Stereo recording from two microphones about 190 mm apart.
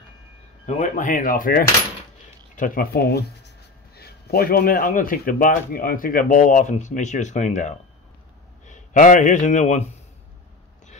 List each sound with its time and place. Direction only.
0.7 s speech: 40° left (ahead or behind)